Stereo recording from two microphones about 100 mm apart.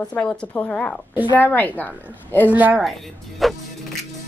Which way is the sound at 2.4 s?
15° right (ahead or behind).